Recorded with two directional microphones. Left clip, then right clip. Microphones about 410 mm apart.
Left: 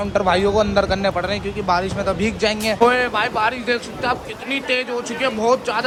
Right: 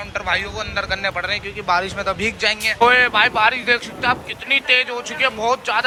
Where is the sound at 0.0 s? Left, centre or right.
Centre.